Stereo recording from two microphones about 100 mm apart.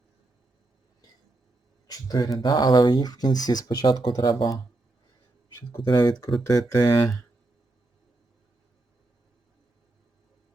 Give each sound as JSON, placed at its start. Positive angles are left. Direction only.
{"t": 1.9, "sound": "a sound", "side_deg": 40}
{"t": 2.4, "sound": "speech", "side_deg": 50}
{"t": 4.2, "sound": "speech", "side_deg": 55}
{"t": 5.9, "sound": "speech", "side_deg": 40}